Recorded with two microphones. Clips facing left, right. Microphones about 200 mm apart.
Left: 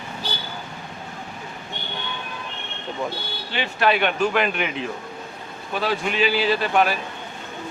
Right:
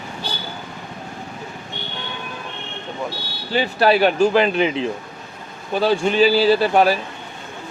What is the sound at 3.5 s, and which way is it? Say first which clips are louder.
Speech: right 5 dB; 35° right (ahead or behind).